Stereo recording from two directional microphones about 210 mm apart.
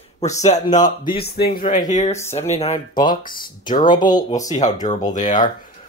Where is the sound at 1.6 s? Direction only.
35° left (ahead or behind).